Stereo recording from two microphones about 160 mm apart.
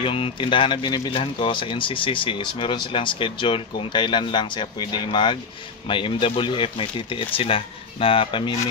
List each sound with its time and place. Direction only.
0.0 s speech: 35° left (ahead or behind)